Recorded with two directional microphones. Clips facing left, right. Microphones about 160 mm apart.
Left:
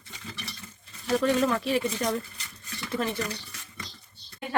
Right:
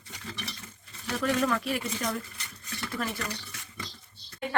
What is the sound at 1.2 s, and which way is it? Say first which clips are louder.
Speech: left 1 dB; 25° left (ahead or behind).